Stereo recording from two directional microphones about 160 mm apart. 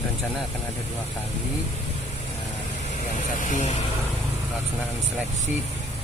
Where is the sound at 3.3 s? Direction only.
45° left (ahead or behind).